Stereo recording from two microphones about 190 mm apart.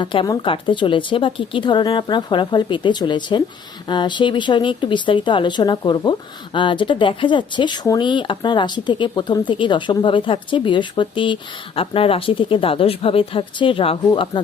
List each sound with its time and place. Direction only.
0.0 s speech: 25° left (ahead or behind)